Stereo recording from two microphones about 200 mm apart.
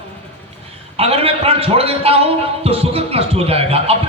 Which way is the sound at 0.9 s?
30° right (ahead or behind).